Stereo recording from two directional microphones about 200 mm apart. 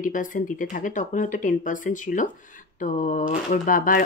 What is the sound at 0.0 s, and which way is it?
Speech, 40° left (ahead or behind).